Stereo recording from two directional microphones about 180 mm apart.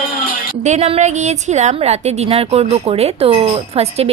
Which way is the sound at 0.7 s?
35° right (ahead or behind).